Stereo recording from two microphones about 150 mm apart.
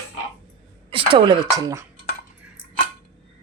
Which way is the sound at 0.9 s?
35° right (ahead or behind).